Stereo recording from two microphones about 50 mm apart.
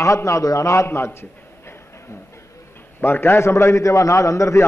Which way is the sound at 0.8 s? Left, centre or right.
Left.